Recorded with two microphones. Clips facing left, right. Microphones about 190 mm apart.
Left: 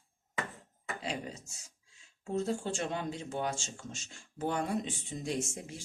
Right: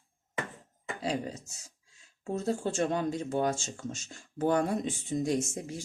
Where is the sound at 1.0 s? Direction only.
40° right (ahead or behind).